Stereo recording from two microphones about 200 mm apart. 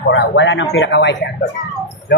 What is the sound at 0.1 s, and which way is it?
A man's voice, 65° left (ahead or behind).